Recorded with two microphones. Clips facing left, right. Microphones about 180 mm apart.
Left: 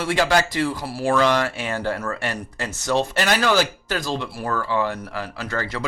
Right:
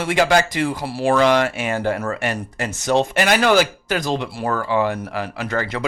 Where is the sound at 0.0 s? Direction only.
15° right (ahead or behind).